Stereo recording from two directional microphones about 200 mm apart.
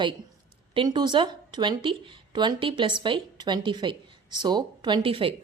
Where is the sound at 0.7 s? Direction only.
25° right (ahead or behind).